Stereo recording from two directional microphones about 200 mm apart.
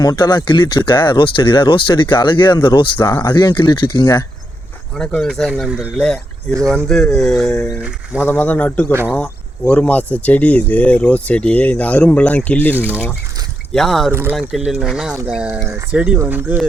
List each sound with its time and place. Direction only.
0.0 s speech: 20° left (ahead or behind)
3.1 s speech: 10° left (ahead or behind)
3.3 s speech: 25° left (ahead or behind)
4.9 s speech: 5° left (ahead or behind)
8.9 s speech: 10° right (ahead or behind)
9.1 s speech: 5° left (ahead or behind)
12.7 s speech: 10° right (ahead or behind)
14.1 s speech: 10° right (ahead or behind)
14.3 s speech: centre (ahead or behind)